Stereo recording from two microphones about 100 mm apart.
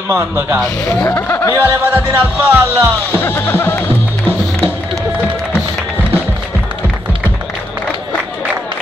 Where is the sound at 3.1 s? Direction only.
25° left (ahead or behind).